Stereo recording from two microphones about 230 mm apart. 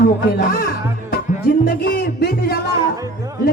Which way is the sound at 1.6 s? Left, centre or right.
Left.